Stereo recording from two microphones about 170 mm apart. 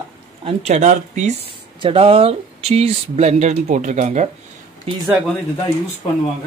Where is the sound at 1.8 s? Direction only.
35° right (ahead or behind).